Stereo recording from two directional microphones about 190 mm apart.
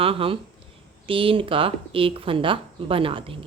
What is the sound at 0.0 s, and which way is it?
A woman's voice, 30° right (ahead or behind).